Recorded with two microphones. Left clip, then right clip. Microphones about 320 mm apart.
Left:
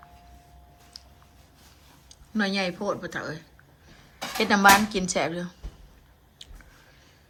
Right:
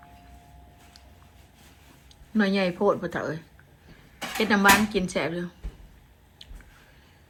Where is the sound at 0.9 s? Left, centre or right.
Centre.